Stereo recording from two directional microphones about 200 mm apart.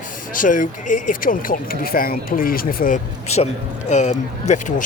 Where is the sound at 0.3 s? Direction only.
40° left (ahead or behind).